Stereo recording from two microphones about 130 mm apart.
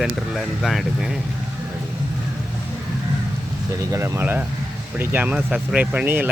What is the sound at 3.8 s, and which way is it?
Speech, 25° right (ahead or behind).